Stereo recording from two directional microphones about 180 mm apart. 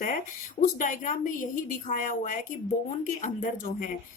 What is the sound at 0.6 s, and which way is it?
Speech, 45° left (ahead or behind).